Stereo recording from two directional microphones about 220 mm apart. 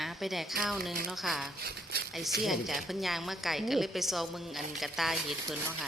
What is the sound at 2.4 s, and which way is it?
A woman's voice, centre (ahead or behind).